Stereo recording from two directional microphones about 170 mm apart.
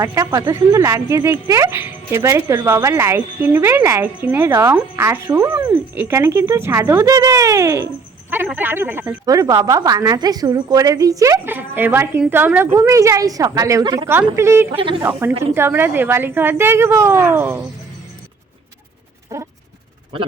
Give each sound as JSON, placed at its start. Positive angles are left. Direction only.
{"t": 0.0, "sound": "a woman's voice", "side_deg": -20}
{"t": 14.8, "sound": "speech", "side_deg": -30}
{"t": 15.5, "sound": "a woman's voice", "side_deg": -15}
{"t": 19.3, "sound": "speech", "side_deg": -20}